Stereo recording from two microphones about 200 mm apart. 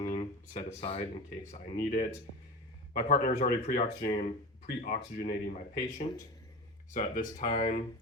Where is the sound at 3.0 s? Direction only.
45° left (ahead or behind).